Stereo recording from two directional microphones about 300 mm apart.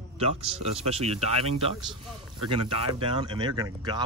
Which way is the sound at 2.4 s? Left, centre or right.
Centre.